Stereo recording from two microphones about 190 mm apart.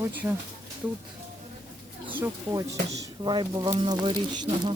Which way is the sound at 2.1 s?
10° right (ahead or behind).